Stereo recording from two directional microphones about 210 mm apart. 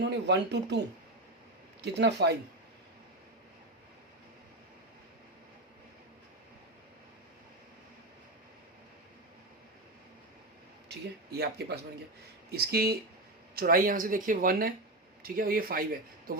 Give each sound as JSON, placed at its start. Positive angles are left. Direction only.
{"t": 0.0, "sound": "speech", "side_deg": -55}
{"t": 1.8, "sound": "speech", "side_deg": -55}
{"t": 11.3, "sound": "speech", "side_deg": -50}